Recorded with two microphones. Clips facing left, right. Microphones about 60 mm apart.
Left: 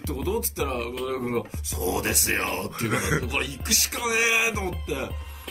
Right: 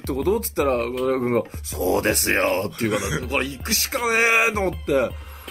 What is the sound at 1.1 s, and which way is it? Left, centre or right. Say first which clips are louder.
Speech: right 6 dB; right.